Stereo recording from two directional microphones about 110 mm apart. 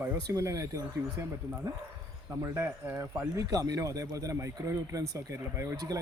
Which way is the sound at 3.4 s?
35° right (ahead or behind).